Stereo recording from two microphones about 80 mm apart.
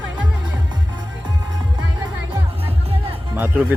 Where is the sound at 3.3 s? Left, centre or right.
Right.